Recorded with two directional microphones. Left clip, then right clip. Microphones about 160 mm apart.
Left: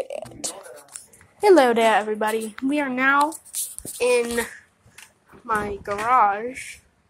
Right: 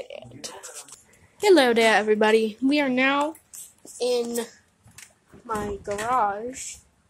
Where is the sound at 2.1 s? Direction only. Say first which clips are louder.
Right 5 dB; 55° right (ahead or behind).